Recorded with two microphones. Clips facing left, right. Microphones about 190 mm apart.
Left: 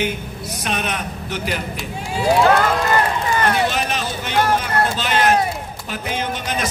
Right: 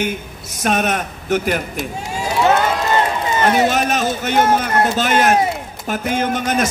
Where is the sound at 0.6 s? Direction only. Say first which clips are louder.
Right 7 dB; 45° right (ahead or behind).